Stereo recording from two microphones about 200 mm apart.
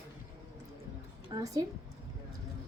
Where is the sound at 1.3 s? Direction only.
15° right (ahead or behind).